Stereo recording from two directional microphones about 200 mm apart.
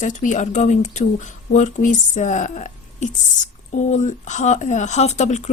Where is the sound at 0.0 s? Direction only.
40° left (ahead or behind).